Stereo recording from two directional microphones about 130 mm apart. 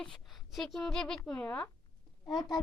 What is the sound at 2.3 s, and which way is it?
Speech, 35° left (ahead or behind).